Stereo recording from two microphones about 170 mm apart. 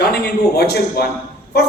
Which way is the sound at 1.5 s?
70° left (ahead or behind).